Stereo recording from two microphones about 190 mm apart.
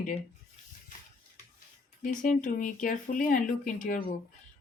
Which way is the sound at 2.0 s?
40° left (ahead or behind).